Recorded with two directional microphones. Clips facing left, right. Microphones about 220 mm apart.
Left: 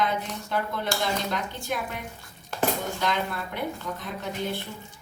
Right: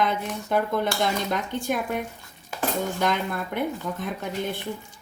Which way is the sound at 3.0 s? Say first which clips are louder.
Right 3 dB; 50° right (ahead or behind).